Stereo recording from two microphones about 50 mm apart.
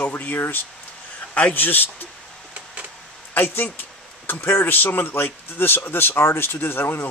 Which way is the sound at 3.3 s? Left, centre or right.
Left.